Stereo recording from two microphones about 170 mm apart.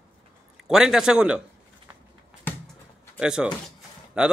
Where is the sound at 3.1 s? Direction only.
5° right (ahead or behind).